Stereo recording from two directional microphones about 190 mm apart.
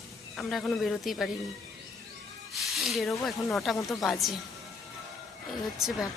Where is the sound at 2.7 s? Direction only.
Centre (ahead or behind).